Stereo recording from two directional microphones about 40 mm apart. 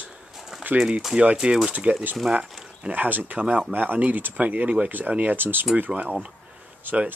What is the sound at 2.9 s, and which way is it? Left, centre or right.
Speech, right.